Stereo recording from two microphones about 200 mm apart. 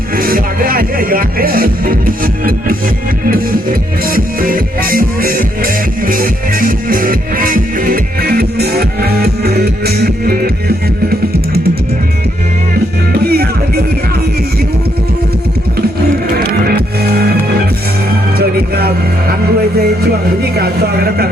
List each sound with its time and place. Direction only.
0.2 s music: 45° right (ahead or behind)
13.3 s music: 50° right (ahead or behind)
16.4 s music: 50° right (ahead or behind)
18.3 s music: 50° right (ahead or behind)